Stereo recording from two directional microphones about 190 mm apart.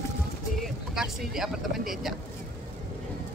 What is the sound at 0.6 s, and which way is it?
Vehicle, centre (ahead or behind).